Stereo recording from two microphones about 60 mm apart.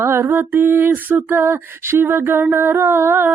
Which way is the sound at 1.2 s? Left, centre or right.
Right.